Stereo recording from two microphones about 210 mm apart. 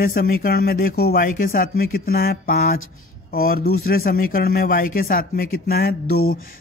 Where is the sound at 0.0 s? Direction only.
45° left (ahead or behind).